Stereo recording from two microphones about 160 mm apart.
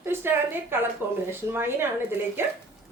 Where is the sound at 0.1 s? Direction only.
15° right (ahead or behind).